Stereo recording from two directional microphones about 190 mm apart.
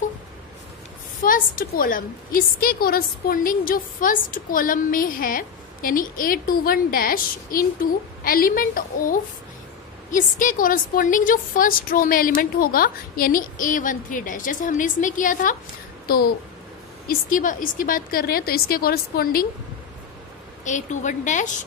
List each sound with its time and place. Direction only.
1.2 s a woman's voice: 45° left (ahead or behind)
20.6 s a woman's voice: 40° left (ahead or behind)